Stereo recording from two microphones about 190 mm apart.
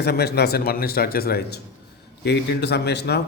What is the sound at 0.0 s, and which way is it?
A man's voice, 55° left (ahead or behind).